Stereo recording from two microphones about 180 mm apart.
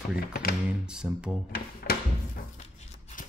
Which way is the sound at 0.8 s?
5° right (ahead or behind).